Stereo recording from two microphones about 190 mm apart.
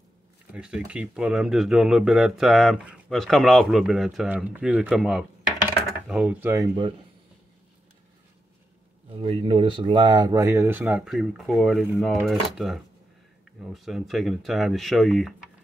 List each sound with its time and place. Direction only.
0.5 s speech: 5° right (ahead or behind)
5.7 s dishes: 5° right (ahead or behind)
9.1 s speech: 30° right (ahead or behind); by 15.3 s centre (ahead or behind)